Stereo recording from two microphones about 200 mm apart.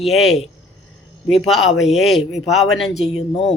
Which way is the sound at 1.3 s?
Centre (ahead or behind).